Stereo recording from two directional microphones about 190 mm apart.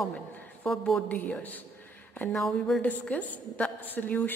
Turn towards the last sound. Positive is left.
turn(degrees=10)  # may be behind; listen again after turning